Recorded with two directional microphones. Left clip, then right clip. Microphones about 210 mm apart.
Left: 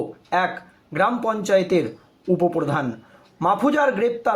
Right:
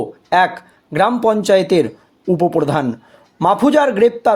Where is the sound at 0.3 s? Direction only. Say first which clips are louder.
Right 8 dB; 45° right (ahead or behind).